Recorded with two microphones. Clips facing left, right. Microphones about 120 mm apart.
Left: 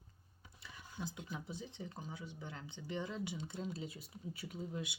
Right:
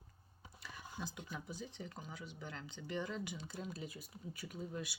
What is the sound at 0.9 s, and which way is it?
Speech, 25° left (ahead or behind).